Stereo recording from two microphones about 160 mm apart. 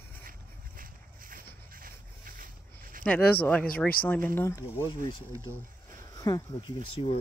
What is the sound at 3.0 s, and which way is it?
Speech, 10° left (ahead or behind).